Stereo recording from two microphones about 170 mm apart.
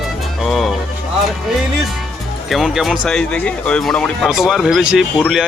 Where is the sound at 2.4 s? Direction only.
Centre (ahead or behind).